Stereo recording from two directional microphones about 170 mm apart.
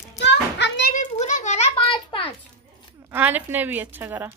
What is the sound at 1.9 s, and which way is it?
Speech, 30° left (ahead or behind).